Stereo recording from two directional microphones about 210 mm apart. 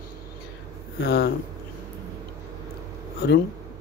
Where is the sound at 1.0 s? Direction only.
50° left (ahead or behind).